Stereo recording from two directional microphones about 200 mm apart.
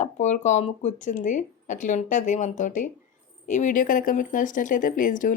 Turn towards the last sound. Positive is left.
turn(degrees=40)  # may be behind; listen again after turning